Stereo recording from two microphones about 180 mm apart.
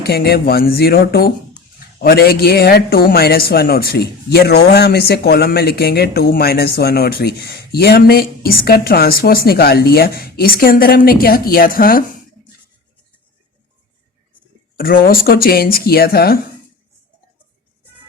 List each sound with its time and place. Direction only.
0.0 s speech: 60° left (ahead or behind)
14.8 s speech: 55° left (ahead or behind)